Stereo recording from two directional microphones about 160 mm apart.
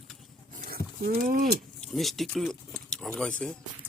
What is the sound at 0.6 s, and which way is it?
Livestock, 65° right (ahead or behind).